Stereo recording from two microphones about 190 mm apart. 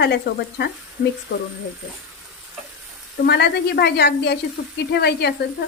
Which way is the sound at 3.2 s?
60° left (ahead or behind).